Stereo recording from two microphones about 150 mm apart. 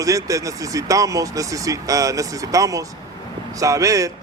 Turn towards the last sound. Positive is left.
turn(degrees=-20)  # may be behind; listen again after turning